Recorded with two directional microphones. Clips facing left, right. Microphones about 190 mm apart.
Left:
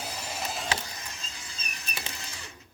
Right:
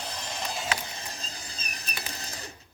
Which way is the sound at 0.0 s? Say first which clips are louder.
Even; 10° left (ahead or behind).